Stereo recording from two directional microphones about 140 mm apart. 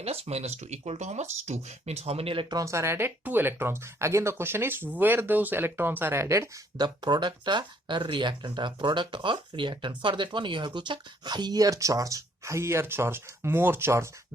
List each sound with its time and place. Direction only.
0.0 s speech: 45° right (ahead or behind)
2.6 s speech: 20° right (ahead or behind)
6.7 s speech: 30° right (ahead or behind)